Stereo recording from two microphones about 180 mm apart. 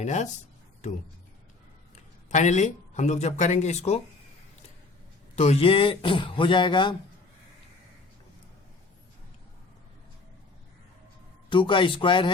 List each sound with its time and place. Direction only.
0.0 s speech: 40° left (ahead or behind)
2.3 s speech: 40° left (ahead or behind)
5.4 s speech: 35° left (ahead or behind)
11.4 s speech: 25° left (ahead or behind)